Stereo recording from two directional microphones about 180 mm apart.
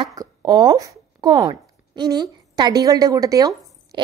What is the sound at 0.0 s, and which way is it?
A woman's voice, 20° right (ahead or behind).